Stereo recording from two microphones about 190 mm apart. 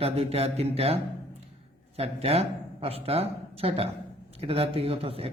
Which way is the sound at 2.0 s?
35° right (ahead or behind).